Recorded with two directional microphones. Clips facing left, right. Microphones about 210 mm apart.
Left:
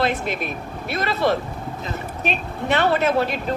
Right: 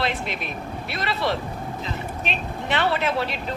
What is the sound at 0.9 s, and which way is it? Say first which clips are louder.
Speech: left 5 dB; 45° left (ahead or behind).